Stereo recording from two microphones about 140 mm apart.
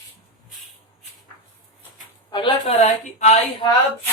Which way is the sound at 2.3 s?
35° left (ahead or behind).